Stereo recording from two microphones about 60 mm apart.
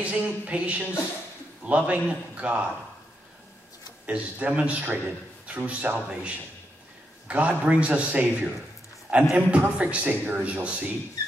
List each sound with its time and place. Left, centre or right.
0.0 s a man's voice: right
4.0 s a man's voice: right